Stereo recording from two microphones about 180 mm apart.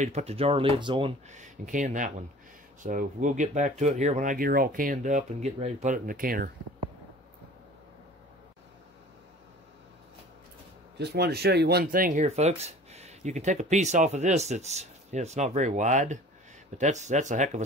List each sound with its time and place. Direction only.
0.0 s speech: 35° right (ahead or behind)
1.3 s speech: 45° right (ahead or behind)
11.0 s speech: 65° right (ahead or behind); by 17.6 s 40° right (ahead or behind)